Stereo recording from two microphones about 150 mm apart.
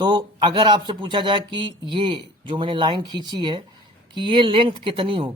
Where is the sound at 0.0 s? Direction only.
30° right (ahead or behind).